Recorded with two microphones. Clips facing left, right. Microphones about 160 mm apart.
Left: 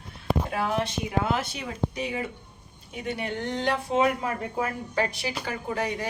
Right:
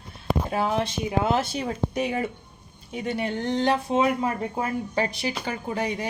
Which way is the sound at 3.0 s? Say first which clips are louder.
Right 3 dB; 35° right (ahead or behind).